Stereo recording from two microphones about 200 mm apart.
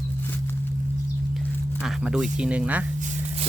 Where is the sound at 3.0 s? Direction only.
35° right (ahead or behind).